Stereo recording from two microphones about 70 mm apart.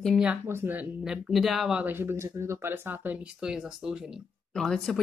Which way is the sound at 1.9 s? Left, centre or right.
Right.